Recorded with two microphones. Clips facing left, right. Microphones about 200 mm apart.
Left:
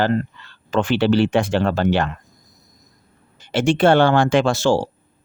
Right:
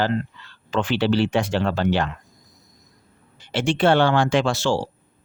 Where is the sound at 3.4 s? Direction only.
45° left (ahead or behind).